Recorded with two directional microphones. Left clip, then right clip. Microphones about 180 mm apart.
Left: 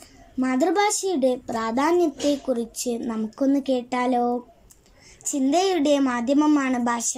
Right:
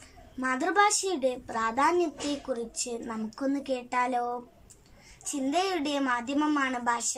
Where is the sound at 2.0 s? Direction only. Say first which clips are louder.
Left 8 dB; centre (ahead or behind).